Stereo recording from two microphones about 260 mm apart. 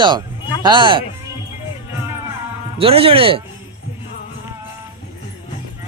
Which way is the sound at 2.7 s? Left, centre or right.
Right.